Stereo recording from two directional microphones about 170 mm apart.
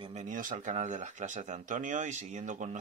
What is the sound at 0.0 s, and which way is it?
Speech, 40° right (ahead or behind).